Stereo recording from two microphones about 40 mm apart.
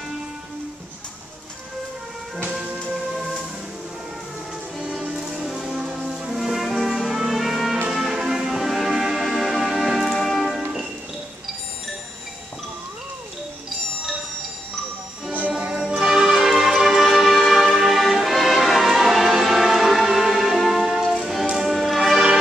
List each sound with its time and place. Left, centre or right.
2.9 s music: centre
5.1 s music: centre
10.0 s music: centre
15.8 s music: centre